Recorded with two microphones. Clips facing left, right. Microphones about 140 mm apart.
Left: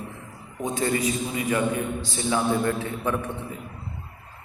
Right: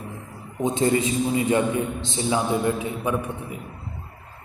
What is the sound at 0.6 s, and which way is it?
A man's voice, 25° right (ahead or behind).